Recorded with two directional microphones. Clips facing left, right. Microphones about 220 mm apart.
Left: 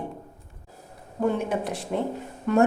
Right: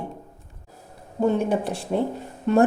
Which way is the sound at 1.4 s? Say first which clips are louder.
Right 4 dB; 30° right (ahead or behind).